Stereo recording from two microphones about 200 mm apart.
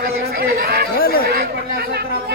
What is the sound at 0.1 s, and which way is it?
Chatter, 50° right (ahead or behind).